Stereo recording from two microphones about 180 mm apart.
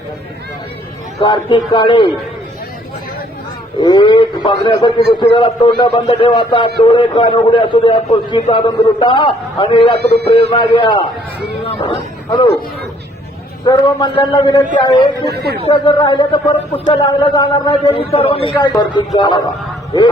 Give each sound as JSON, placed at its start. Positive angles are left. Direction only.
{"t": 1.2, "sound": "a man's voice", "side_deg": 25}
{"t": 3.8, "sound": "a man's voice", "side_deg": 25}
{"t": 10.0, "sound": "a man's voice", "side_deg": -65}
{"t": 10.5, "sound": "a man's voice", "side_deg": 25}
{"t": 13.7, "sound": "a man's voice", "side_deg": 25}
{"t": 15.3, "sound": "a man's voice", "side_deg": -60}
{"t": 15.6, "sound": "a man's voice", "side_deg": 25}